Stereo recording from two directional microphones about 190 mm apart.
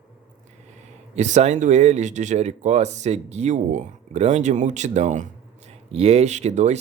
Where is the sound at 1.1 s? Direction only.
35° right (ahead or behind).